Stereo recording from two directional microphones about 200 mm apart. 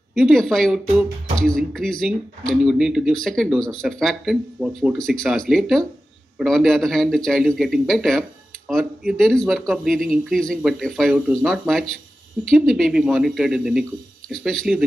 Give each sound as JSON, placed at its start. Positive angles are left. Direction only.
{"t": 0.1, "sound": "speech", "side_deg": 0}